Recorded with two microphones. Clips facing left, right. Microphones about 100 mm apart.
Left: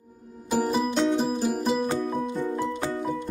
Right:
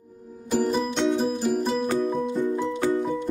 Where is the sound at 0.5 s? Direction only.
5° left (ahead or behind).